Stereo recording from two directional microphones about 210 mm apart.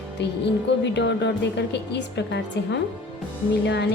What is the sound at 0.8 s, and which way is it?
A woman's voice, 55° left (ahead or behind).